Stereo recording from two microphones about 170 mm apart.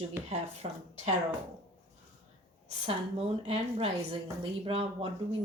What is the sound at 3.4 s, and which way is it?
A woman's voice, 30° right (ahead or behind).